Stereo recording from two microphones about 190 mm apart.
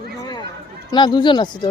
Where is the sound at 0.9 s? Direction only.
25° left (ahead or behind).